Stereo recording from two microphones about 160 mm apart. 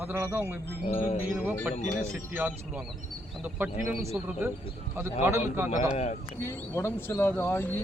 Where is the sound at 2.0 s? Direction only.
10° right (ahead or behind).